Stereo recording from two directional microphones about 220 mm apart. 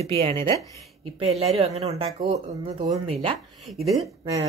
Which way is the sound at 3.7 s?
40° right (ahead or behind).